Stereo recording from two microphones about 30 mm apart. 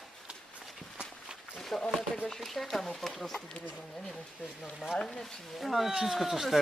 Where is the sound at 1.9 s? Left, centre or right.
Centre.